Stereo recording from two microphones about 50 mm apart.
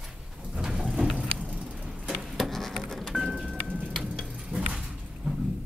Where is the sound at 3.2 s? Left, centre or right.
Centre.